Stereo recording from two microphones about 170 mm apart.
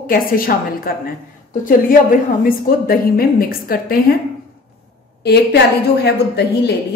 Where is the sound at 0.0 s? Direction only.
60° left (ahead or behind).